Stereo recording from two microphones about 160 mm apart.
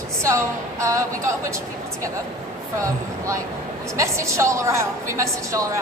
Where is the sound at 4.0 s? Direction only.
20° right (ahead or behind).